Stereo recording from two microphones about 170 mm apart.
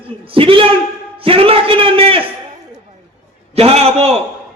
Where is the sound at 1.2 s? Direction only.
35° right (ahead or behind).